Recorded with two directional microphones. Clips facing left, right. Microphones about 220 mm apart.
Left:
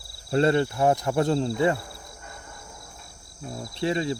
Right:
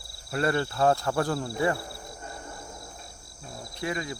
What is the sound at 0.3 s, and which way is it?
Speech, 25° left (ahead or behind).